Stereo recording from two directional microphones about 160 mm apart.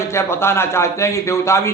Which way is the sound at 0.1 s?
15° left (ahead or behind).